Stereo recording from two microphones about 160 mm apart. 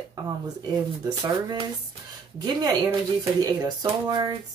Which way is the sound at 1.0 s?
25° right (ahead or behind).